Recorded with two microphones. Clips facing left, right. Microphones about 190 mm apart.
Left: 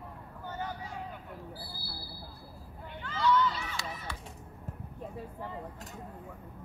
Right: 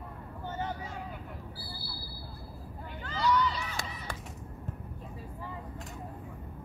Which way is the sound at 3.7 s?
50° right (ahead or behind).